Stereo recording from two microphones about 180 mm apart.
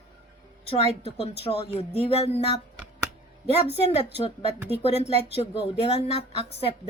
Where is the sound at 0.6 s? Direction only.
35° left (ahead or behind).